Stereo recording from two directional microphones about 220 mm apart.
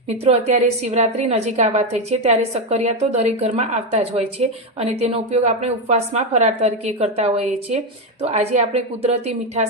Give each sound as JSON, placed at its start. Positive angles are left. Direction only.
{"t": 0.3, "sound": "a woman's voice", "side_deg": -30}